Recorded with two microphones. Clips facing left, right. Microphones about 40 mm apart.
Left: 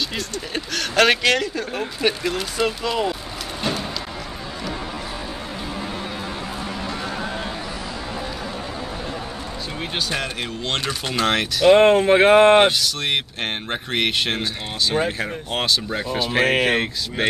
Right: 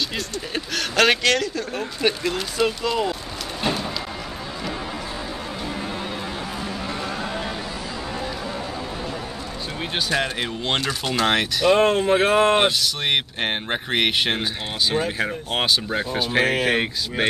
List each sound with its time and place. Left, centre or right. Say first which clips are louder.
0.7 s speech: left 1 dB; centre
9.9 s speech: right 3 dB; centre
11.2 s speech: even; centre
11.6 s speech: left 5 dB; left
12.8 s speech: right 1 dB; centre
16.4 s speech: left 2 dB; left
16.7 s speech: even; centre